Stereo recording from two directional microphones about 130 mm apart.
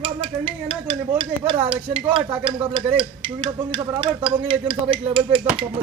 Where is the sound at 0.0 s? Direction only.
45° right (ahead or behind).